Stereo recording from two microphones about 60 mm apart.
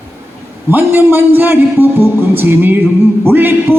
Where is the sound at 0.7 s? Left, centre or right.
Right.